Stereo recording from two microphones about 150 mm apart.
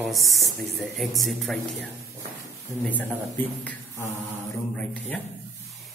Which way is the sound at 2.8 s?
10° left (ahead or behind).